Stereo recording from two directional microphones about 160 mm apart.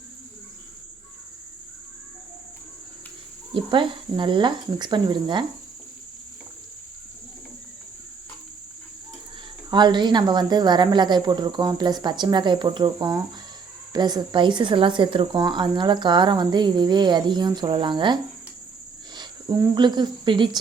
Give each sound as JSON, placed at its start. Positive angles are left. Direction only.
{"t": 3.5, "sound": "a woman's voice", "side_deg": -30}
{"t": 9.6, "sound": "a woman's voice", "side_deg": -25}
{"t": 19.1, "sound": "a sound", "side_deg": -25}
{"t": 19.7, "sound": "a woman's voice", "side_deg": -30}